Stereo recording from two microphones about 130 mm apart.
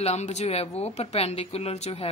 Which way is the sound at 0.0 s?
60° left (ahead or behind).